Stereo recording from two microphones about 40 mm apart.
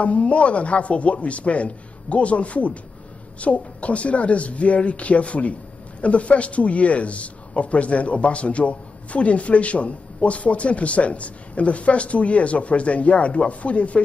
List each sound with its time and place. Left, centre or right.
0.0 s speech: left